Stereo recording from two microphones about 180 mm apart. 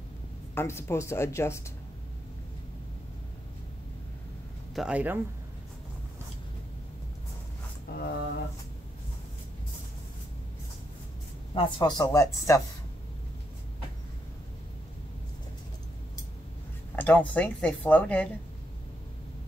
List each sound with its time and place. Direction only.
0.6 s a woman's voice: 15° left (ahead or behind)
4.7 s speech: 5° right (ahead or behind)
7.9 s a sound: 60° left (ahead or behind)
11.5 s speech: 25° left (ahead or behind)
16.9 s a sound: 10° left (ahead or behind)
17.3 s a woman's voice: 10° left (ahead or behind)